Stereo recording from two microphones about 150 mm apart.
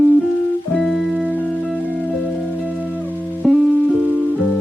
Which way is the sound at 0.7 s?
Centre (ahead or behind).